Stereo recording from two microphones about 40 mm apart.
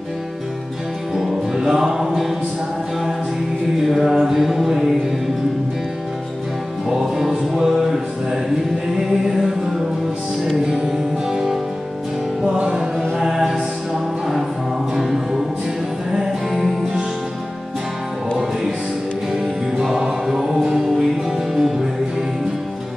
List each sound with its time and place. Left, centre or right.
1.1 s music: centre
3.9 s mantra: centre
6.9 s music: centre
9.0 s mantra: centre
10.9 s music: centre
12.5 s music: right
13.2 s music: centre
16.1 s music: centre
19.8 s music: centre